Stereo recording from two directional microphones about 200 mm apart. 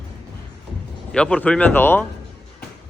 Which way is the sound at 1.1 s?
5° left (ahead or behind).